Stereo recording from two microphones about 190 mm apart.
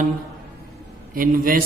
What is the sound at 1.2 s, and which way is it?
Speech, 50° right (ahead or behind).